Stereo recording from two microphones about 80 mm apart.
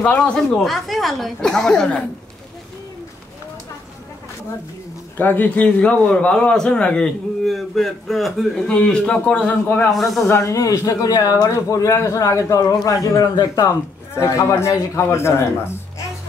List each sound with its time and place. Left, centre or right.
0.2 s a man's voice: centre
5.1 s a man's voice: left
7.4 s a woman's voice: centre
8.6 s a man's voice: centre
9.8 s a woman's voice: centre
10.2 s speech: left
13.7 s a man's voice: left